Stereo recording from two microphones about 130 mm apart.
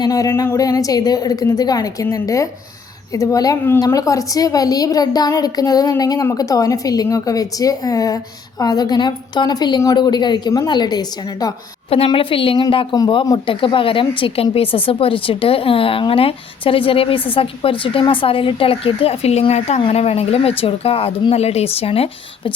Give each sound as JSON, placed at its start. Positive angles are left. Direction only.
{"t": 0.0, "sound": "a woman's voice", "side_deg": 25}
{"t": 11.9, "sound": "a man's voice", "side_deg": 45}